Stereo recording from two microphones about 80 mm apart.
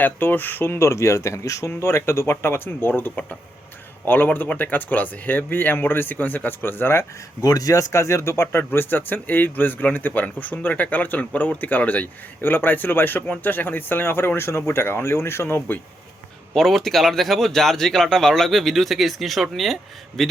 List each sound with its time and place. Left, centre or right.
0.0 s speech: left
7.4 s speech: left
16.6 s speech: centre